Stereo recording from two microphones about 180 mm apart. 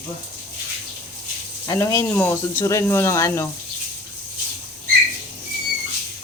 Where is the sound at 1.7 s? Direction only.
20° left (ahead or behind).